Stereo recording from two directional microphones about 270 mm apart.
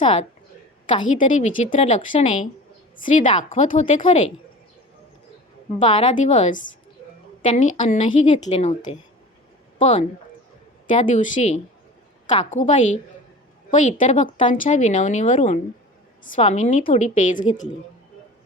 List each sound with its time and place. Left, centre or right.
0.0 s speech: left
5.8 s speech: centre